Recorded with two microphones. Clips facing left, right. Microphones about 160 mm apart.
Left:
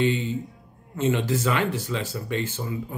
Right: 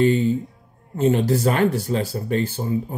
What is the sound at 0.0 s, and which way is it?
Speech, 40° right (ahead or behind).